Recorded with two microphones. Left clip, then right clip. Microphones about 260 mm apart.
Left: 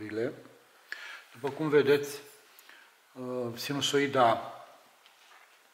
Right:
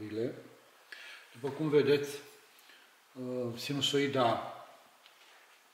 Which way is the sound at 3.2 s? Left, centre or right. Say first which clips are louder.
Left 2 dB; centre.